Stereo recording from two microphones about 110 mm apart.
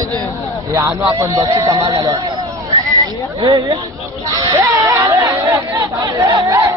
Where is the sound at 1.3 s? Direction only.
35° right (ahead or behind).